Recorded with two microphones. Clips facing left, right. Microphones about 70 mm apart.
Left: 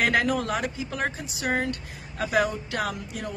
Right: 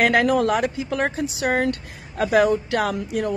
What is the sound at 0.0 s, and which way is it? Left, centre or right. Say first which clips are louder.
Speech: right 6 dB; right.